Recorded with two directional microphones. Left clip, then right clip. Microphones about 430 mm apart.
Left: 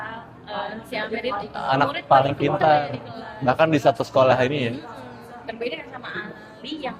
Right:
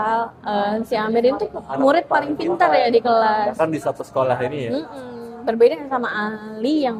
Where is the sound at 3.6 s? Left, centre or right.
Centre.